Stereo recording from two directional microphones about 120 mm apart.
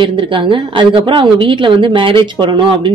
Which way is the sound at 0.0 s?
45° right (ahead or behind).